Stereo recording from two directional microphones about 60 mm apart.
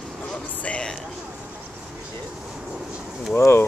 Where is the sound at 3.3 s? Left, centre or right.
Left.